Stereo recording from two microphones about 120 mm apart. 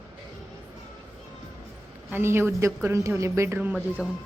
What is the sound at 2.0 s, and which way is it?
Speech, 20° right (ahead or behind).